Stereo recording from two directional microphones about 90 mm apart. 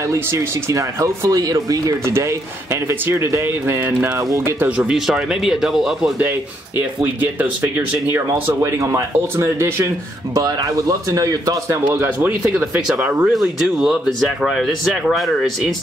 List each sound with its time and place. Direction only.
0.1 s speech: 35° right (ahead or behind)
2.0 s speech: 30° right (ahead or behind)
4.6 s speech: 10° right (ahead or behind)
6.8 s speech: 20° right (ahead or behind)
8.5 s speech: 35° right (ahead or behind)
11.9 s speech: 25° right (ahead or behind)
13.3 s speech: centre (ahead or behind)